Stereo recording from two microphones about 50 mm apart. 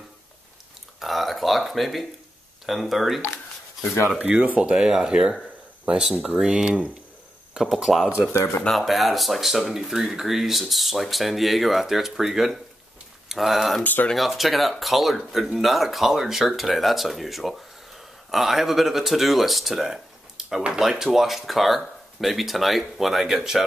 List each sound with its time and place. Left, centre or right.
0.9 s speech: centre
4.2 s speech: right; by 20.0 s centre
20.4 s a sound: centre
20.9 s speech: centre